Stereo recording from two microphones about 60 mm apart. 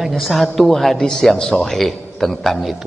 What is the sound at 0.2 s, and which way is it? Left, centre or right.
A man's voice, centre.